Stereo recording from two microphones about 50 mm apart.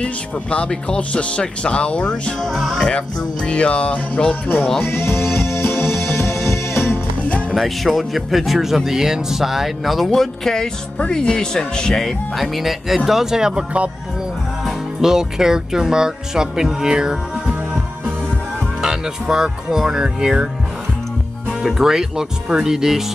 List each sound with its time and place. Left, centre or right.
0.0 s speech: left
2.4 s speech: centre
3.4 s speech: left
4.8 s music: left
7.5 s speech: centre
15.0 s speech: centre
18.8 s speech: centre
21.6 s speech: centre